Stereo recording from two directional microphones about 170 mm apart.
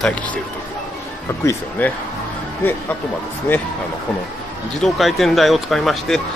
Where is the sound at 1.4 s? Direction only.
15° left (ahead or behind).